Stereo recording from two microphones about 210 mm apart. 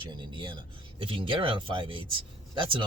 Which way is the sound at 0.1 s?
20° right (ahead or behind).